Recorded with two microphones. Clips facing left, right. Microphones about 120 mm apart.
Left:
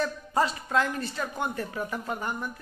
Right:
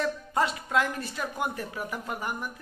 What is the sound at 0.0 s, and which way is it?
Speech, centre (ahead or behind).